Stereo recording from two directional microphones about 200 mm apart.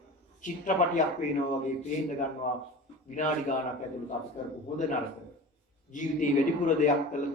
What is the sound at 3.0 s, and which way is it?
Speech, 40° left (ahead or behind).